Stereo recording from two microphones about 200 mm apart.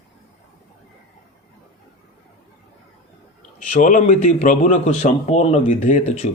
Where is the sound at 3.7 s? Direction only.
40° left (ahead or behind).